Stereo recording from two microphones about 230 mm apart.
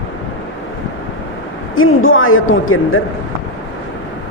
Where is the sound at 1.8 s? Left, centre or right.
Left.